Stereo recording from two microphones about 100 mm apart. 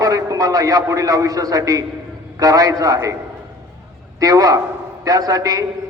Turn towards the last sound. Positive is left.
turn(degrees=-35)  # may be behind; listen again after turning